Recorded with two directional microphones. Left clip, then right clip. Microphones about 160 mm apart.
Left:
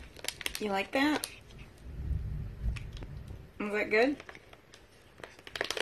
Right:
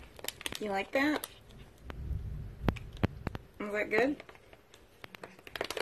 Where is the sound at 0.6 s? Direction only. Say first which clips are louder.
Left 1 dB; 35° left (ahead or behind).